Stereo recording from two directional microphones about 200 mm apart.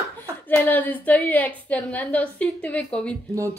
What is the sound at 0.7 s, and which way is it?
A woman's voice, 10° left (ahead or behind).